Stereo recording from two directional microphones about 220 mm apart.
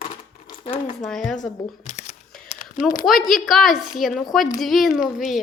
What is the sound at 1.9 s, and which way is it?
Camera, 30° left (ahead or behind).